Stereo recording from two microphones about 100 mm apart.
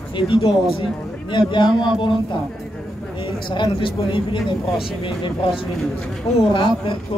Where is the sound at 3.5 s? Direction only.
55° left (ahead or behind).